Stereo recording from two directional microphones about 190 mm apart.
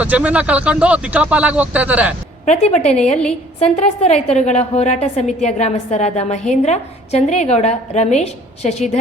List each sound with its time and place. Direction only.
0.0 s speech: 5° right (ahead or behind)
2.5 s a woman's voice: 35° left (ahead or behind)